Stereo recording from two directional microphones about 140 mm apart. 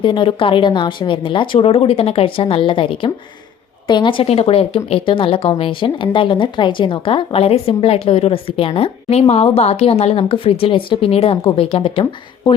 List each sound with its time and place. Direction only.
0.0 s speech: 35° left (ahead or behind)